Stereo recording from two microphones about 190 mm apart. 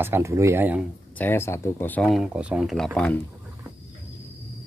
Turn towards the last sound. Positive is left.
turn(degrees=5)  # may be behind; listen again after turning